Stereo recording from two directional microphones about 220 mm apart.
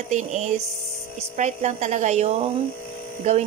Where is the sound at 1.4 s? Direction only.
30° right (ahead or behind).